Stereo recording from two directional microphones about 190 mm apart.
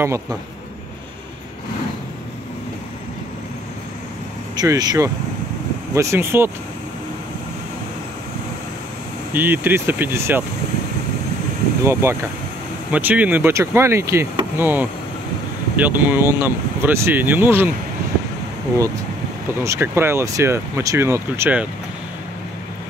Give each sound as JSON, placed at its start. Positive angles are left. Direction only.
{"t": 4.6, "sound": "speech", "side_deg": -20}
{"t": 9.3, "sound": "speech", "side_deg": -10}
{"t": 11.8, "sound": "speech", "side_deg": -15}
{"t": 19.6, "sound": "speech", "side_deg": -15}